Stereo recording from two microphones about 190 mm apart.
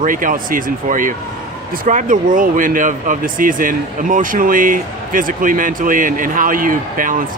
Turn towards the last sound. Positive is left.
turn(degrees=-45)  # may be behind; listen again after turning